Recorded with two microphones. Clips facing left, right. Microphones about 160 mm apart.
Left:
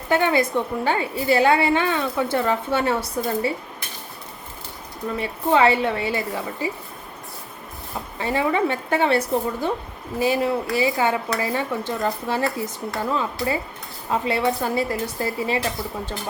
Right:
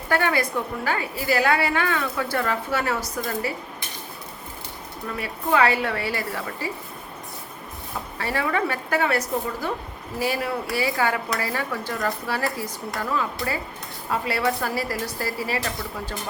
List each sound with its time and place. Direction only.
0.1 s a woman's voice: 20° left (ahead or behind)
5.1 s a woman's voice: 25° left (ahead or behind)
8.2 s a woman's voice: 20° left (ahead or behind)